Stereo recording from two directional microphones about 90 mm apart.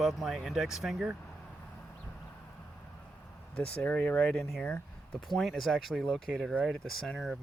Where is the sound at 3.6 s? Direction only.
15° left (ahead or behind).